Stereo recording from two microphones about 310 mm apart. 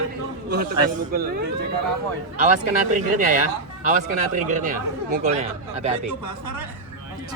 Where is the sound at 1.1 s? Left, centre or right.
Right.